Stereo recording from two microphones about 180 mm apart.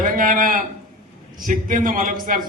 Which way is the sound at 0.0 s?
50° right (ahead or behind).